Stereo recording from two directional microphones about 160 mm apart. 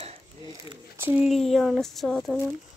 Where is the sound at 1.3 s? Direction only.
Centre (ahead or behind).